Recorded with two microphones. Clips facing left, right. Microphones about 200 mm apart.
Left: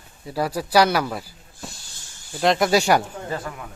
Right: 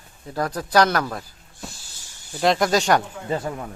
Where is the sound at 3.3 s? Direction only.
25° right (ahead or behind).